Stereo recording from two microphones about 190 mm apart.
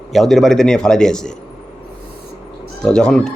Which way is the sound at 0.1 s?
Centre (ahead or behind).